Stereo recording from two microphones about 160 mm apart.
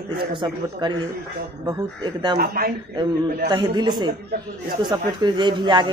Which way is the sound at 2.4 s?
70° right (ahead or behind).